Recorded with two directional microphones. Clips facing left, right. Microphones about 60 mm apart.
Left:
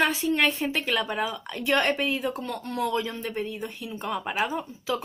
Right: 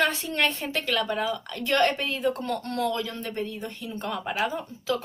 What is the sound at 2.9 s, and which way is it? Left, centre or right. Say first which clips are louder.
A woman's voice: left 2 dB; centre.